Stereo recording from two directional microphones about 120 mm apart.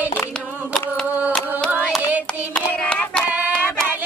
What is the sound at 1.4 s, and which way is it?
Music, 5° left (ahead or behind).